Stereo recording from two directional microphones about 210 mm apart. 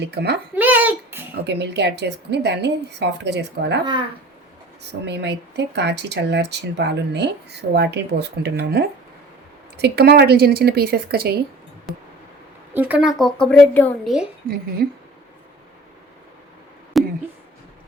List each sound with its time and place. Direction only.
0.0 s speech: 50° right (ahead or behind)
0.5 s a sound: 10° right (ahead or behind)
1.5 s speech: 55° right (ahead or behind)
4.8 s speech: 55° right (ahead or behind)
12.7 s a woman's voice: 5° right (ahead or behind)
14.4 s speech: 45° right (ahead or behind)
16.9 s a sound: centre (ahead or behind)